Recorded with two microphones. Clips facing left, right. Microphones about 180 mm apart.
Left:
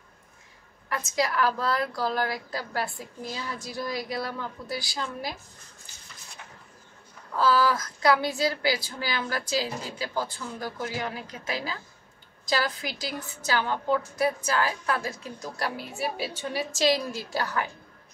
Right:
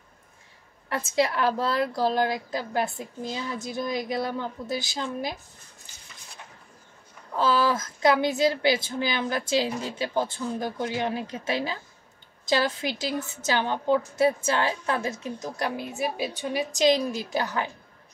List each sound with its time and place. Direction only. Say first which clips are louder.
0.8 s a woman's voice: right 3 dB; 30° right (ahead or behind)
7.3 s a woman's voice: even; 25° right (ahead or behind)